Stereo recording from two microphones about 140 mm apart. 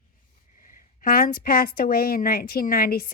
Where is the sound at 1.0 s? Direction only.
90° left.